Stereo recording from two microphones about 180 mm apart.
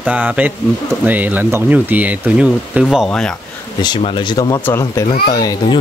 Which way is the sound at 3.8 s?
25° left (ahead or behind).